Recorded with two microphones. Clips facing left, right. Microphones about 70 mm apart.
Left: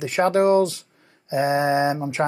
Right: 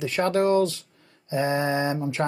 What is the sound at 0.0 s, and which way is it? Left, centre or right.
Speech, centre.